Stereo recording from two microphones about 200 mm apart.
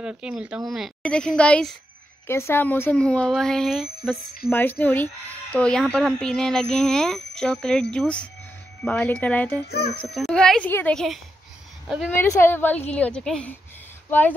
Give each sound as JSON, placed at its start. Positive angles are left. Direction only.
{"t": 0.0, "sound": "a woman's voice", "side_deg": -5}
{"t": 9.7, "sound": "speech", "side_deg": 55}
{"t": 9.9, "sound": "a woman's voice", "side_deg": 0}